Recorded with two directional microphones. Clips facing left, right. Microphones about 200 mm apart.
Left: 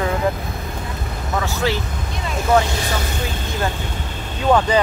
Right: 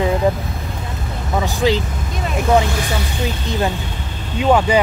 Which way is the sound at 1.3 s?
15° right (ahead or behind).